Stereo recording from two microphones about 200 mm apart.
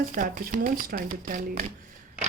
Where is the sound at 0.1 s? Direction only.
45° right (ahead or behind).